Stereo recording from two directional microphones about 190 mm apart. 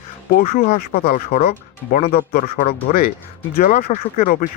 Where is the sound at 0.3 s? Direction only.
50° left (ahead or behind).